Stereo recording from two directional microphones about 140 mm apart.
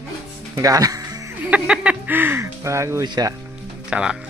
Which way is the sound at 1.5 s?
10° right (ahead or behind).